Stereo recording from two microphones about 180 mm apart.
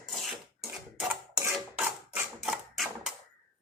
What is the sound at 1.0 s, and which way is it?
Rub, 10° right (ahead or behind).